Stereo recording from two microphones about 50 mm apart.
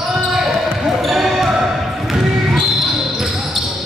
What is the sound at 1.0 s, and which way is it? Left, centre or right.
Basketball bounce, centre.